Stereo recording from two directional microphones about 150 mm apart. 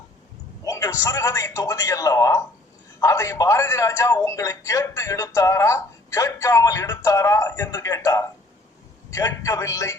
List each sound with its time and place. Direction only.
0.6 s a man's voice: 20° left (ahead or behind)